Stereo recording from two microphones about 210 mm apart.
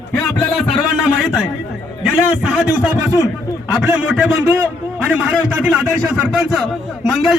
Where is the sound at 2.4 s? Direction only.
5° right (ahead or behind).